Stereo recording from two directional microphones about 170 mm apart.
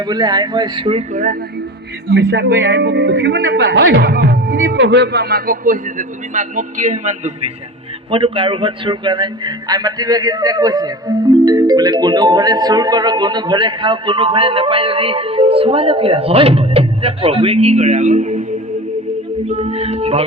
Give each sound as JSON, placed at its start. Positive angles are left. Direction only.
{"t": 0.0, "sound": "speech", "side_deg": -25}
{"t": 1.1, "sound": "speech", "side_deg": -55}
{"t": 2.0, "sound": "a man's voice", "side_deg": -85}
{"t": 8.1, "sound": "a man's voice", "side_deg": -30}
{"t": 19.5, "sound": "a man's voice", "side_deg": -40}